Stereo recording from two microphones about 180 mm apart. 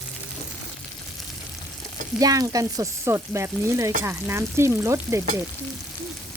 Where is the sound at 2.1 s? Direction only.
20° right (ahead or behind).